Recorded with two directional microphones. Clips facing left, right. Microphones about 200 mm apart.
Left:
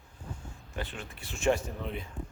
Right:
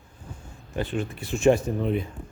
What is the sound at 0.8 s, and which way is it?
Speech, 15° right (ahead or behind).